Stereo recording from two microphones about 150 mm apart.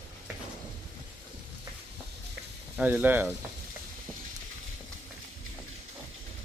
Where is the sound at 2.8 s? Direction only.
10° right (ahead or behind).